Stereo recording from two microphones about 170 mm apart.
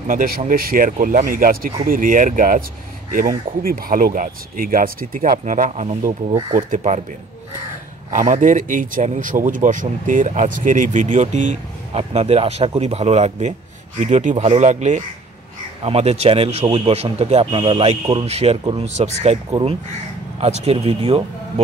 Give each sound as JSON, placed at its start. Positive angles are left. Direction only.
{"t": 0.1, "sound": "speech", "side_deg": -55}
{"t": 8.1, "sound": "speech", "side_deg": -50}